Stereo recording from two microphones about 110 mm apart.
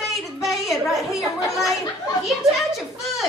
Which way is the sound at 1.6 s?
30° left (ahead or behind).